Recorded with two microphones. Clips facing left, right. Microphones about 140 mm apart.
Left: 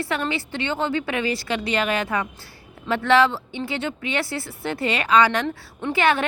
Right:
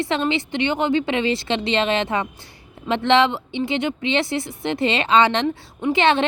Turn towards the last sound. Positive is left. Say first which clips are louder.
# right 3 dB
turn(degrees=-20)  # may be behind; listen again after turning